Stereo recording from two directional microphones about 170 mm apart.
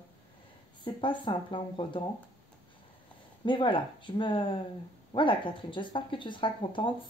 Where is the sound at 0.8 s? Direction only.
30° left (ahead or behind).